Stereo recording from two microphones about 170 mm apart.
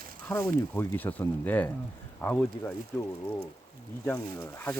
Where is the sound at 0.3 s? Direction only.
10° left (ahead or behind).